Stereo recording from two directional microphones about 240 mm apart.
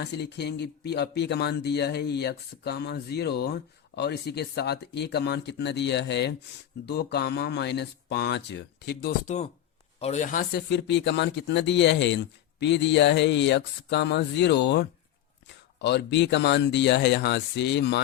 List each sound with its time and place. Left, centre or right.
0.0 s speech: left
10.7 s speech: left